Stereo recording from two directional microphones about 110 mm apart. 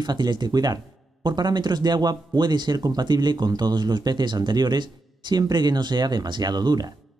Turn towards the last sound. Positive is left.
turn(degrees=-40)  # may be behind; listen again after turning